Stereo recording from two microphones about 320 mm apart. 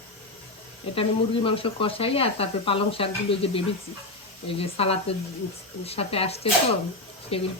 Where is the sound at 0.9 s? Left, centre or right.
Centre.